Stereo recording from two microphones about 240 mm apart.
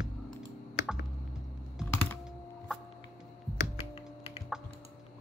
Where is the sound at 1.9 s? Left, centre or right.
Centre.